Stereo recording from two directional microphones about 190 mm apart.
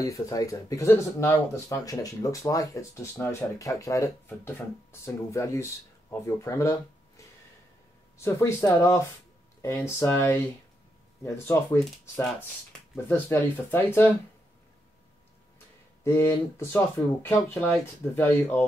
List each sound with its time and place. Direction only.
0.0 s speech: 15° left (ahead or behind)
8.2 s speech: 15° left (ahead or behind)
16.0 s speech: 15° left (ahead or behind)